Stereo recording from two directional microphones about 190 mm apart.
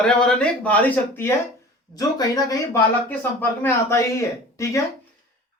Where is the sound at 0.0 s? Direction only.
5° left (ahead or behind).